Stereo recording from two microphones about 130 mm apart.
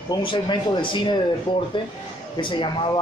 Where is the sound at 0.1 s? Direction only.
40° left (ahead or behind).